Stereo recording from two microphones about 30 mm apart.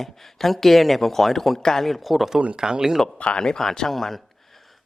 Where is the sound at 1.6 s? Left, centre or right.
Centre.